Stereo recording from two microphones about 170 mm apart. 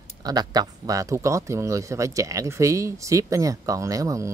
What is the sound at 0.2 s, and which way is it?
Speech, 20° right (ahead or behind).